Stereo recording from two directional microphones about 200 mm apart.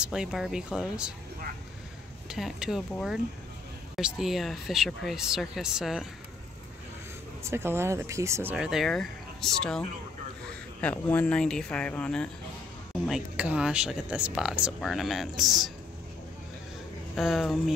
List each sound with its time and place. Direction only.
0.0 s speech: 5° right (ahead or behind)
2.2 s speech: centre (ahead or behind)
7.4 s speech: 10° right (ahead or behind); by 12.3 s 5° left (ahead or behind)
13.0 s speech: 5° right (ahead or behind)
17.1 s speech: centre (ahead or behind)